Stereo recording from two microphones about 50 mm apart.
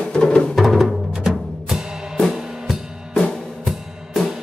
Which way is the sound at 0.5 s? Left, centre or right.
Centre.